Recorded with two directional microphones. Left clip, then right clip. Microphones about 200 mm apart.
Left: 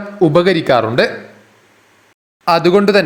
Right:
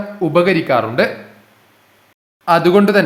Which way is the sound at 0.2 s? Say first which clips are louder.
Left 2 dB; 25° left (ahead or behind).